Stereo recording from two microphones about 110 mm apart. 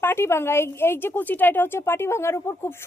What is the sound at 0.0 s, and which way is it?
A woman's voice, 20° left (ahead or behind).